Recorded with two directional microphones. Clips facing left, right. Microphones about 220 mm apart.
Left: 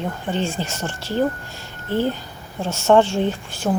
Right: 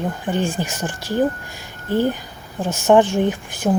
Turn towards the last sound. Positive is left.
turn(degrees=-15)  # may be behind; listen again after turning